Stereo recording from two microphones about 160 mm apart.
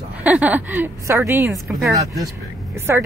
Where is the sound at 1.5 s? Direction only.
Centre (ahead or behind).